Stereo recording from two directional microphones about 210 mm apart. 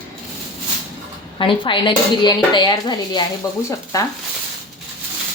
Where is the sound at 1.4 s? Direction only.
25° left (ahead or behind).